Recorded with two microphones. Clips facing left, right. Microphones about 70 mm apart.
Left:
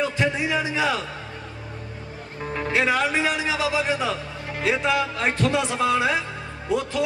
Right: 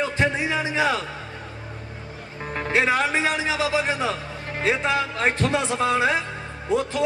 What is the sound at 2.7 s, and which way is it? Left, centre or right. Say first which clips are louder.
A man's voice: right 1 dB; right.